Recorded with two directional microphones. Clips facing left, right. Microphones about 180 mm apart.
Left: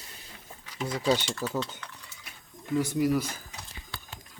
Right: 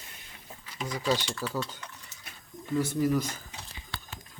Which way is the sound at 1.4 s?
15° left (ahead or behind).